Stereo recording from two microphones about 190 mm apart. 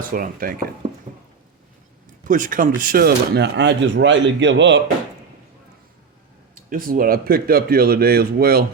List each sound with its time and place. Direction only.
0.0 s speech: 45° right (ahead or behind)
2.2 s speech: 45° right (ahead or behind); by 4.8 s 70° right (ahead or behind)
6.5 s speech: 50° right (ahead or behind)